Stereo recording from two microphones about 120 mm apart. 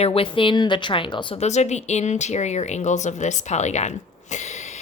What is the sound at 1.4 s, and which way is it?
A woman's voice, 70° left (ahead or behind).